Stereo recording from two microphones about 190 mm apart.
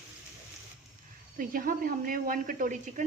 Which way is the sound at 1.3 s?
50° right (ahead or behind).